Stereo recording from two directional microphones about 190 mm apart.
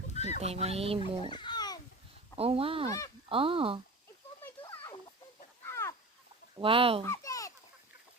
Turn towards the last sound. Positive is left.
turn(degrees=15)  # may be behind; listen again after turning